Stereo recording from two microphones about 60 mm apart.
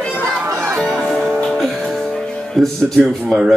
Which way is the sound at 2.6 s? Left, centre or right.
Centre.